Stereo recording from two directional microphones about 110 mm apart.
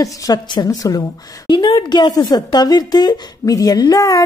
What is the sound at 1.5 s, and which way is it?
Speech, 45° left (ahead or behind).